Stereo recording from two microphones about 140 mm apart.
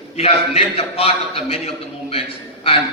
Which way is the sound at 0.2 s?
45° left (ahead or behind).